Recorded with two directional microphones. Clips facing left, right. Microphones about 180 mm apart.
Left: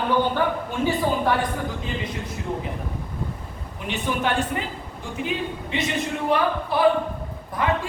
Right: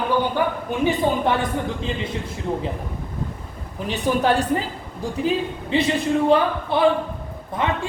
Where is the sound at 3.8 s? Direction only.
35° right (ahead or behind).